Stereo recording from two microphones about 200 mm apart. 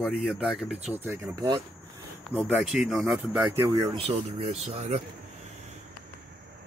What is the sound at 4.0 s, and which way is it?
Speech, 30° right (ahead or behind).